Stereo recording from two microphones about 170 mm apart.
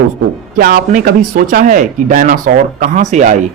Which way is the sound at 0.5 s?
60° right (ahead or behind).